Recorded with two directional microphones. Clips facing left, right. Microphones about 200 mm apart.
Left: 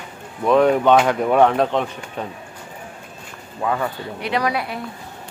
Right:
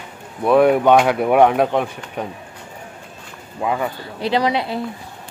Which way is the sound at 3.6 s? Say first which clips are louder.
Right 1 dB; 15° right (ahead or behind).